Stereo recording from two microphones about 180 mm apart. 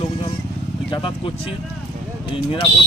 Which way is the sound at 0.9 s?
30° left (ahead or behind).